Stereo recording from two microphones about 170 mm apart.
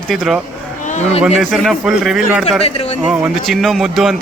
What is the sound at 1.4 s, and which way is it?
A man's voice, centre (ahead or behind).